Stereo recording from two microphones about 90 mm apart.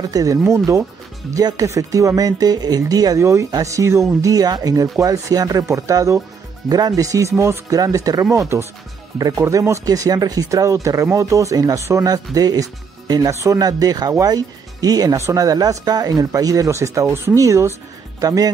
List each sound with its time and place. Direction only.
0.1 s speech: 40° right (ahead or behind)
13.6 s speech: 45° right (ahead or behind)